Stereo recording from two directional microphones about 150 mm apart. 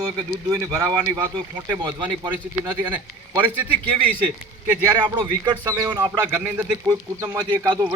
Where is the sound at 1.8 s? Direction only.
30° right (ahead or behind).